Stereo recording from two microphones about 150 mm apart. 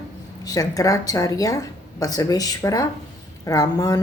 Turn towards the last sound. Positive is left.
turn(degrees=25)  # may be behind; listen again after turning